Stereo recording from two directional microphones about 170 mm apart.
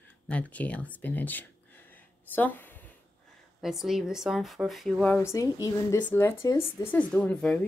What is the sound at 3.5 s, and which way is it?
Speech, centre (ahead or behind).